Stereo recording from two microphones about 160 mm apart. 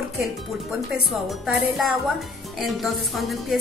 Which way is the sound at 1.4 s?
Centre (ahead or behind).